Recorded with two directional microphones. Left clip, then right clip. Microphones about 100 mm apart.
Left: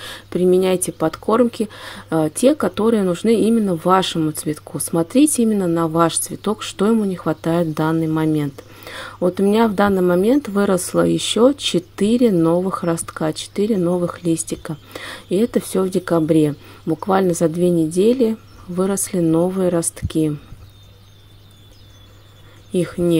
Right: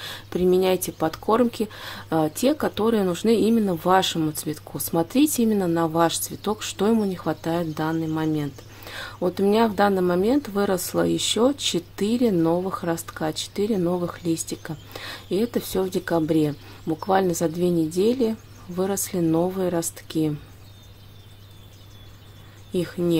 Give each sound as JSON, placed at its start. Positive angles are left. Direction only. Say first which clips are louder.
{"t": 0.0, "sound": "speech", "louder": "left 5 dB", "side_deg": 20}
{"t": 5.5, "sound": "speech", "louder": "left 4 dB", "side_deg": 10}
{"t": 5.8, "sound": "speech", "louder": "left 4 dB", "side_deg": 25}
{"t": 7.7, "sound": "speech", "louder": "left 6 dB", "side_deg": 45}
{"t": 22.7, "sound": "speech", "louder": "left 6 dB", "side_deg": 25}